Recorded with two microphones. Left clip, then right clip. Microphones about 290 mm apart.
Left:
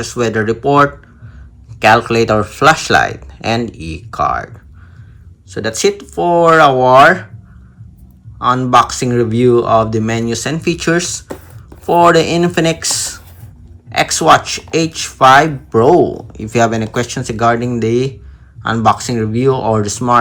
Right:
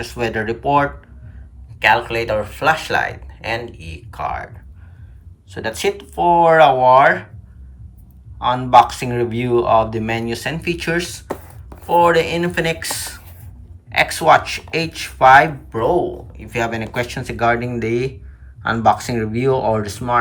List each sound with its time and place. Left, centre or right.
0.0 s speech: centre
5.5 s speech: centre
8.4 s speech: centre